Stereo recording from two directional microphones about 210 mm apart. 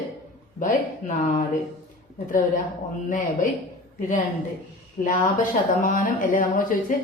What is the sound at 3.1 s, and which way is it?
Speech, 40° left (ahead or behind).